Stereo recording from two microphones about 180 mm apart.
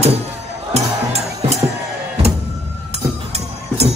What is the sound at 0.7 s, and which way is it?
Music, 35° right (ahead or behind).